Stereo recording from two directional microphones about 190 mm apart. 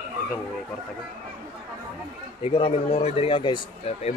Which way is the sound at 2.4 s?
30° left (ahead or behind).